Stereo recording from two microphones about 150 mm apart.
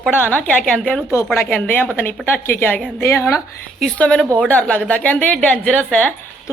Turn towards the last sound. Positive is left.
turn(degrees=10)  # may be behind; listen again after turning